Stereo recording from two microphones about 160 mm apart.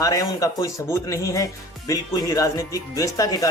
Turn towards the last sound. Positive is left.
turn(degrees=20)  # may be behind; listen again after turning